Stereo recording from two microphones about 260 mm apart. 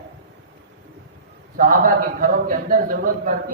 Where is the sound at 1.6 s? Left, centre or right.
Right.